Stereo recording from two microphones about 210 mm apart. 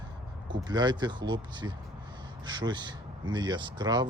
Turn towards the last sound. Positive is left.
turn(degrees=-20)  # may be behind; listen again after turning